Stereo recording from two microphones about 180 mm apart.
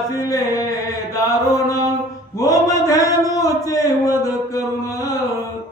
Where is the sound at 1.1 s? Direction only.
20° left (ahead or behind).